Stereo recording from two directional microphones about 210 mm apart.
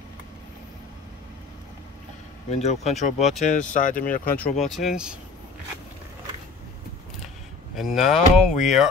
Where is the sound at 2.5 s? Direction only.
30° left (ahead or behind).